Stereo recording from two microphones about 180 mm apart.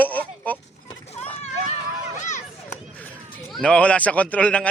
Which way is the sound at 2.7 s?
15° left (ahead or behind).